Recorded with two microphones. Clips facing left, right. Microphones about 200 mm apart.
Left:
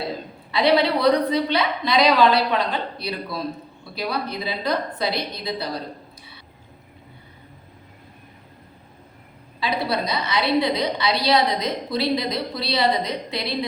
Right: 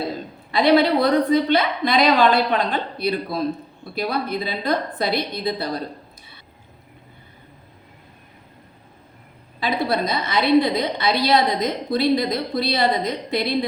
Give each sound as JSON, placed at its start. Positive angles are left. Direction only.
{"t": 0.5, "sound": "a woman's voice", "side_deg": -50}
{"t": 9.6, "sound": "a woman's voice", "side_deg": -50}